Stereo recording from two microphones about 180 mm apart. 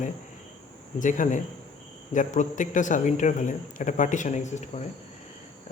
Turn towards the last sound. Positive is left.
turn(degrees=40)  # may be behind; listen again after turning